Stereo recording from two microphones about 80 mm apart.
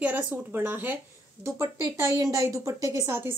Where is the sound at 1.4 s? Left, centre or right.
Right.